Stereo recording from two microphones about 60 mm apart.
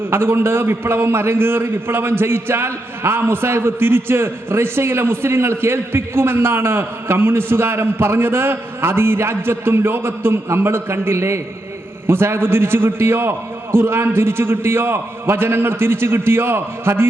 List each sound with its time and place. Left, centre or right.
0.1 s a man's voice: right